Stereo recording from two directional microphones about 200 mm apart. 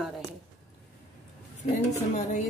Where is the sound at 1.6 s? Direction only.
35° left (ahead or behind).